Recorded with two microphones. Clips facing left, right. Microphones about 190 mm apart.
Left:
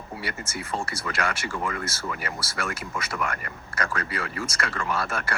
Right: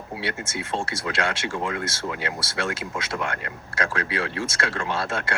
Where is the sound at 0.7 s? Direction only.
25° right (ahead or behind).